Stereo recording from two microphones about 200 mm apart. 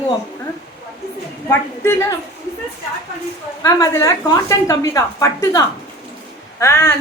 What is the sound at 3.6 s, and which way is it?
A woman's voice, 15° left (ahead or behind).